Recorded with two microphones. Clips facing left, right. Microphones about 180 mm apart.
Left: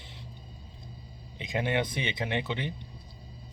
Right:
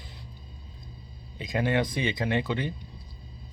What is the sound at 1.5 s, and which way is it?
Speech, 20° left (ahead or behind).